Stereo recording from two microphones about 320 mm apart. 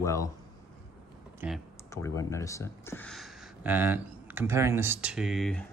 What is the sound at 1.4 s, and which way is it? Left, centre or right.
Speech, centre.